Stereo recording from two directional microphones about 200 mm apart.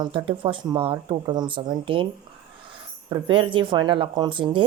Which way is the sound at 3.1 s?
25° right (ahead or behind).